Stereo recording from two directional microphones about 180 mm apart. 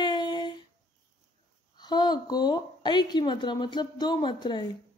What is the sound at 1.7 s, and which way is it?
A woman's voice, 25° left (ahead or behind).